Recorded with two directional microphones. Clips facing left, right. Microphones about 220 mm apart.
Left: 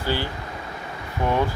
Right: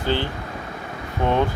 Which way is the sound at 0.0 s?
20° right (ahead or behind).